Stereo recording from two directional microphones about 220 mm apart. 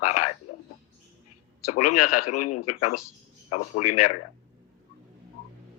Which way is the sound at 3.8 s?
90° left.